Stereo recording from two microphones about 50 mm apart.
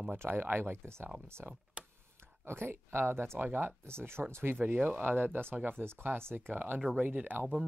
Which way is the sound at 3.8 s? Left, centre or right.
Right.